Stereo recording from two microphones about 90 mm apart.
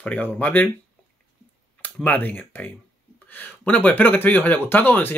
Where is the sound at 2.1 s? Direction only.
20° left (ahead or behind).